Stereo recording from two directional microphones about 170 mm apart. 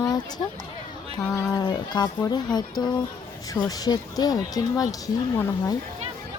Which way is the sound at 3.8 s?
20° left (ahead or behind).